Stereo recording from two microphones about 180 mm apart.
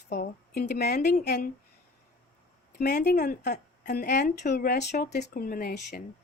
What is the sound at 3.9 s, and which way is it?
Speech, 65° left (ahead or behind).